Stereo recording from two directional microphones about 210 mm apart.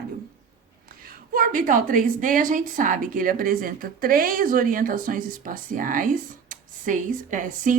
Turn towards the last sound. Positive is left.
turn(degrees=-40)  # may be behind; listen again after turning